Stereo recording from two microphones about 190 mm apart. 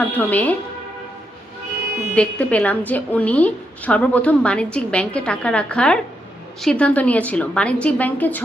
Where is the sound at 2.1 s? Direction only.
5° left (ahead or behind).